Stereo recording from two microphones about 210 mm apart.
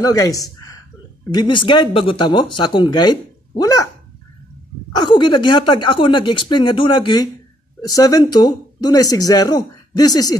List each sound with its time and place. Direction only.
0.0 s speech: 15° left (ahead or behind)
4.9 s speech: 20° left (ahead or behind)